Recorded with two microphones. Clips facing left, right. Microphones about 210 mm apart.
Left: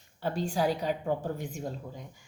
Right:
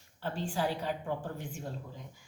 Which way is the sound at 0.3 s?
40° left (ahead or behind).